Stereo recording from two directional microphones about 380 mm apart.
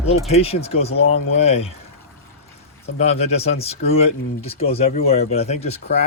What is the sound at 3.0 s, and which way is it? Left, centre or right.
Speech, centre.